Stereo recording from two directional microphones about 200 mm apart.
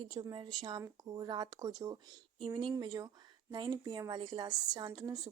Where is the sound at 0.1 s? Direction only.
20° right (ahead or behind).